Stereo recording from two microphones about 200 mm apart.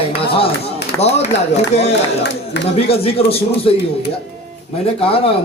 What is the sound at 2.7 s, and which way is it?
Speech, 30° left (ahead or behind).